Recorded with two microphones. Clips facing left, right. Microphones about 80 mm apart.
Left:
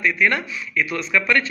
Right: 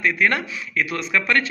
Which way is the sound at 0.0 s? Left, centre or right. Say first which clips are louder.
Even; right.